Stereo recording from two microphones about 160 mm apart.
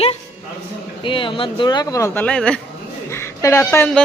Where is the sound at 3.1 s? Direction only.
15° left (ahead or behind).